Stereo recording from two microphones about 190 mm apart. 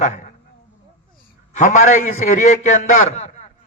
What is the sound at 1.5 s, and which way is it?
A man's voice, 40° left (ahead or behind).